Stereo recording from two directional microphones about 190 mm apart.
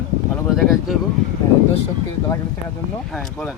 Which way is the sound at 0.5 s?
Centre (ahead or behind).